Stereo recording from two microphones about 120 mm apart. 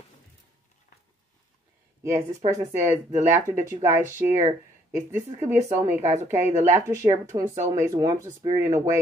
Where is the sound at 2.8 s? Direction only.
20° right (ahead or behind).